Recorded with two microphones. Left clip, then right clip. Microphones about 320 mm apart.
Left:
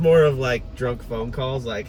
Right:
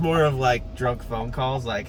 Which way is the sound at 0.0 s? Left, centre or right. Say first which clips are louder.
Left 4 dB; centre.